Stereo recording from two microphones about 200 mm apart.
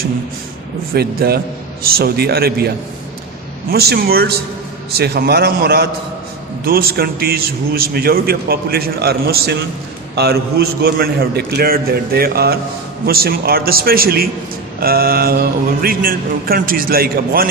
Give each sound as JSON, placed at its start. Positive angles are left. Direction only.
{"t": 0.9, "sound": "a man's voice", "side_deg": -50}